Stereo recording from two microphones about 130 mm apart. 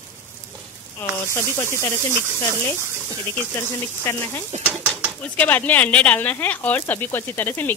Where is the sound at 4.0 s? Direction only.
20° left (ahead or behind).